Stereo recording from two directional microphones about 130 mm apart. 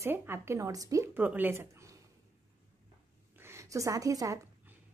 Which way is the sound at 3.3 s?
20° right (ahead or behind).